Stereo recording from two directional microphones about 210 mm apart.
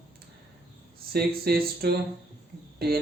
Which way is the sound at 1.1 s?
45° right (ahead or behind).